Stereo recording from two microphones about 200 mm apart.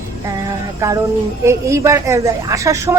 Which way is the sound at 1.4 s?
15° right (ahead or behind).